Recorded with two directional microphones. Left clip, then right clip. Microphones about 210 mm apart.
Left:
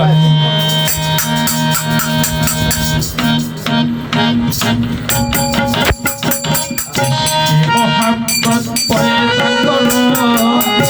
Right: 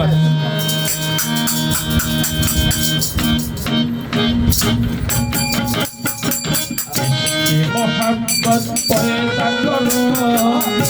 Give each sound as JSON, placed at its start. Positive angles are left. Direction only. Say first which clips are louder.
{"t": 0.3, "sound": "music", "louder": "left 6 dB", "side_deg": 45}
{"t": 7.2, "sound": "music", "louder": "left 3 dB", "side_deg": 50}